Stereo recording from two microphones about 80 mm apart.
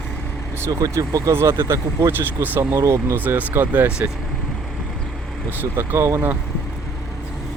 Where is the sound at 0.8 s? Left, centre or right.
Right.